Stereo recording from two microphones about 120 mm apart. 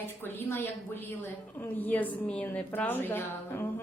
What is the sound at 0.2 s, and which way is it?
A woman's voice, 15° left (ahead or behind).